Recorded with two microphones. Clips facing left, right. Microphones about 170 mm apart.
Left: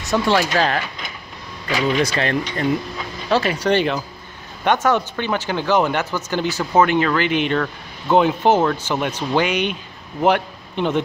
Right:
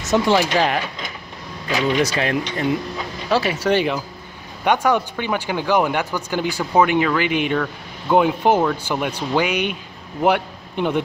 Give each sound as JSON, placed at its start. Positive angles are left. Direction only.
{"t": 0.0, "sound": "speech", "side_deg": -20}
{"t": 2.0, "sound": "a man's voice", "side_deg": -10}